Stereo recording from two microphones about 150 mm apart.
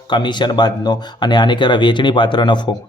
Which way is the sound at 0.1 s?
30° left (ahead or behind).